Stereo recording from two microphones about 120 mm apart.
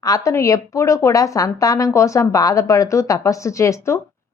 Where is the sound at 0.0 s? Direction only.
30° left (ahead or behind).